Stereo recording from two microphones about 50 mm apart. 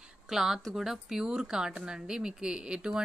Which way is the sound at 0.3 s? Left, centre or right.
Centre.